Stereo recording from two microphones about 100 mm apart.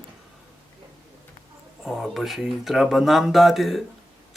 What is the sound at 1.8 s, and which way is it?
Speech, centre (ahead or behind).